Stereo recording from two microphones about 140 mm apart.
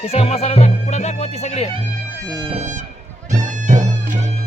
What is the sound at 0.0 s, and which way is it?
Speech, 45° left (ahead or behind).